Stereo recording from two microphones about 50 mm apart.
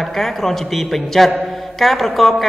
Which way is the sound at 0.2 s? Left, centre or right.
Centre.